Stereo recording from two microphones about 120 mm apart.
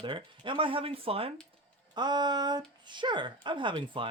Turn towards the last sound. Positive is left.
turn(degrees=-45)  # may be behind; listen again after turning